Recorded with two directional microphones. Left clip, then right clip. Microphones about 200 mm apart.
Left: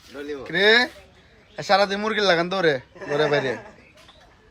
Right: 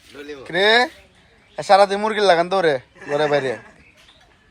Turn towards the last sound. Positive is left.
turn(degrees=0)  # may be behind; listen again after turning